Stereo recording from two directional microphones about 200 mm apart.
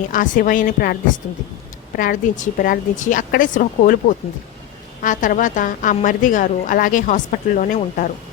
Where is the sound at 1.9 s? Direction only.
40° left (ahead or behind).